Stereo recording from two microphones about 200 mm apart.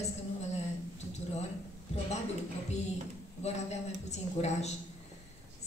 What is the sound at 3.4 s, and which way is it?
A woman's voice, 35° left (ahead or behind).